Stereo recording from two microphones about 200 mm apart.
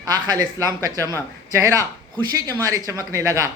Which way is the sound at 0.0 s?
20° right (ahead or behind).